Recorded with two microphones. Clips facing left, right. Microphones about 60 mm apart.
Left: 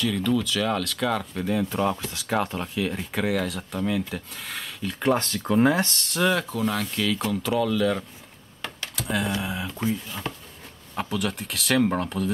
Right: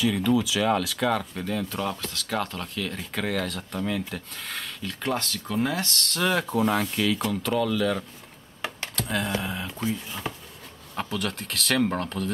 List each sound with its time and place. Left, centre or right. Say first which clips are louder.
0.0 s speech: right 1 dB; centre
1.4 s speech: left 4 dB; centre
5.0 s speech: left 6 dB; left
6.1 s speech: left 1 dB; centre
7.2 s speech: left 1 dB; centre
8.9 s a sound: left 2 dB; centre
11.0 s speech: left 2 dB; centre